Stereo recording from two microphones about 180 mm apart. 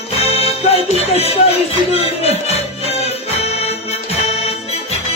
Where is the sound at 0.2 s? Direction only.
35° left (ahead or behind).